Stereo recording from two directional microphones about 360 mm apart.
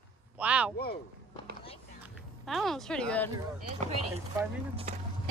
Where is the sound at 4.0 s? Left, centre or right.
Centre.